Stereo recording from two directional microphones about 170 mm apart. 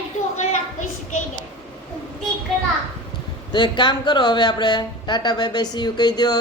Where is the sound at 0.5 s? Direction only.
45° left (ahead or behind).